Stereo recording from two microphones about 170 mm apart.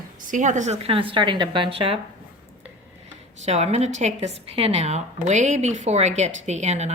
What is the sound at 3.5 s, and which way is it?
A woman's voice, 40° right (ahead or behind).